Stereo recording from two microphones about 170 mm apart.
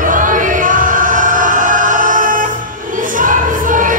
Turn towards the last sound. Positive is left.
turn(degrees=-50)  # may be behind; listen again after turning